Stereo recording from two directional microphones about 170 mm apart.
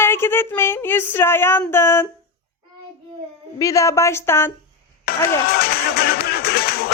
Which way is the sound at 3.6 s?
20° left (ahead or behind).